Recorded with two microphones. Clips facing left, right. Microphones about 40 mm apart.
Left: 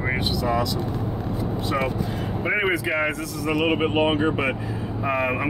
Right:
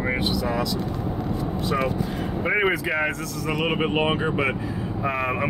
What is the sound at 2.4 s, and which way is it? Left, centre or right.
Speech, centre.